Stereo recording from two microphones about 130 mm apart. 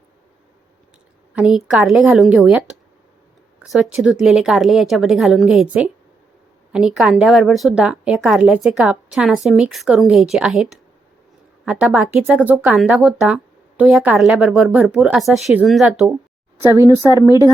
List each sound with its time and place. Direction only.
1.4 s a woman's voice: 10° right (ahead or behind)
6.7 s a woman's voice: 5° right (ahead or behind)
16.6 s speech: 20° right (ahead or behind)